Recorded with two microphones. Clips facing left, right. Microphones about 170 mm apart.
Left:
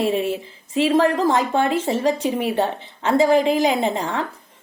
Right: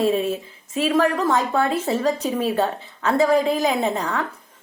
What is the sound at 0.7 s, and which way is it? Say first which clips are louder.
A woman's voice: left 2 dB; 30° left (ahead or behind).